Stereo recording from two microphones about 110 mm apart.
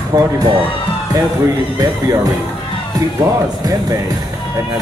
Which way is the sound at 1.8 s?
35° right (ahead or behind).